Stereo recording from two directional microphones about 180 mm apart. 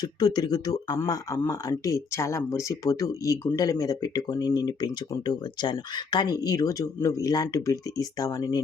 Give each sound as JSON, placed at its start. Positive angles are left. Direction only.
{"t": 0.0, "sound": "speech", "side_deg": 25}